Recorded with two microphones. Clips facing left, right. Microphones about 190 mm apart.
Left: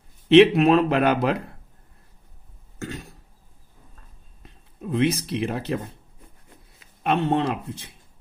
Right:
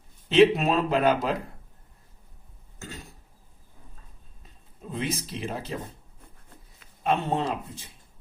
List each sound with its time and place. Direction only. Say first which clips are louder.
0.3 s speech: left 5 dB; 65° left (ahead or behind)
2.7 s cough: left 8 dB; 65° left (ahead or behind)
4.4 s speech: left 8 dB; 65° left (ahead or behind)
7.0 s speech: left 4 dB; 65° left (ahead or behind)